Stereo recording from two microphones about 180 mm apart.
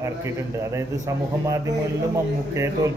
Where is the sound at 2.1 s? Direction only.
15° right (ahead or behind).